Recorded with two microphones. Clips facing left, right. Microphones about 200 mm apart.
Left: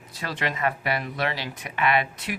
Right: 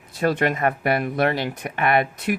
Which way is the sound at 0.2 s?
50° right (ahead or behind).